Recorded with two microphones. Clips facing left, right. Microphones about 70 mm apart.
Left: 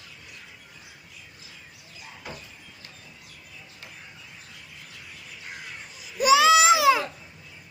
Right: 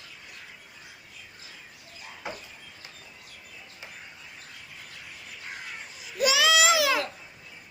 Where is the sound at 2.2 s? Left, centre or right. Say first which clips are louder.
Right 3 dB; right.